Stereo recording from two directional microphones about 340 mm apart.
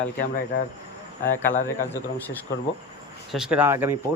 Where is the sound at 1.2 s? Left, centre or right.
Centre.